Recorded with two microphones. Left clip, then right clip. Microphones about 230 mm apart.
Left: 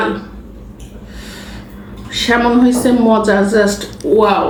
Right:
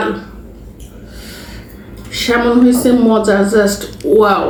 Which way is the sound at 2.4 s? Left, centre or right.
Centre.